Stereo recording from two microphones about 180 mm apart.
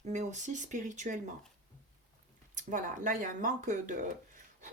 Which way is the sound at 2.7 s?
50° right (ahead or behind).